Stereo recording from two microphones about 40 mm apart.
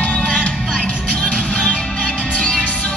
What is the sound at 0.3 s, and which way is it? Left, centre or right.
Music, left.